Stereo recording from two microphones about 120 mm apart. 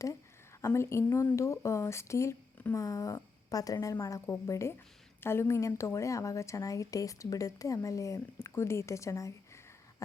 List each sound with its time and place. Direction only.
0.6 s a woman's voice: 25° left (ahead or behind)